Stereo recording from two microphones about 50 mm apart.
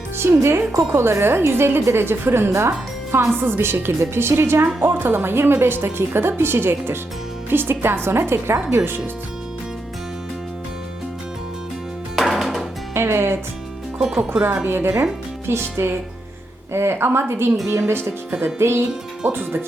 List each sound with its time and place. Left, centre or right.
0.4 s a woman's voice: right
2.5 s speech: right
3.4 s a woman's voice: right
12.1 s music: centre
12.9 s speech: right
14.4 s speech: right
14.7 s a woman's voice: right
17.7 s speech: right
18.6 s a woman's voice: right
19.3 s a woman's voice: right